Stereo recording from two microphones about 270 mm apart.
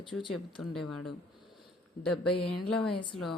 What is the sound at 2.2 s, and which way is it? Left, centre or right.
Speech, left.